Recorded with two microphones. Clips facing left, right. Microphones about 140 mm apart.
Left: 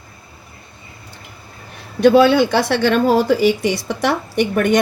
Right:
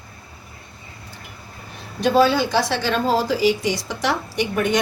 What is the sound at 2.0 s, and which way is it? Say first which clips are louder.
A woman's voice: left 6 dB; 65° left (ahead or behind).